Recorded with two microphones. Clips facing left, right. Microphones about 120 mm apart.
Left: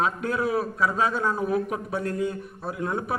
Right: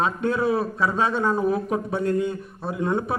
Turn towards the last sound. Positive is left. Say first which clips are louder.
# right 4 dB
turn(degrees=-25)  # may be behind; listen again after turning